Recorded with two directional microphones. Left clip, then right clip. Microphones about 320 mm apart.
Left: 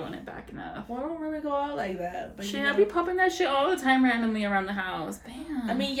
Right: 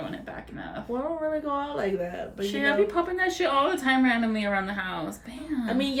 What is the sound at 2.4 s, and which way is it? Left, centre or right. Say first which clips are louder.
A woman's voice: right 1 dB; centre.